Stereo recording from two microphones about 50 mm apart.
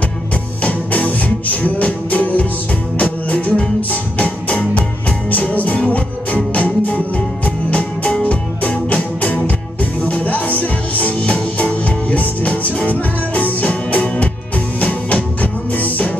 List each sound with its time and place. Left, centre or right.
0.6 s music: left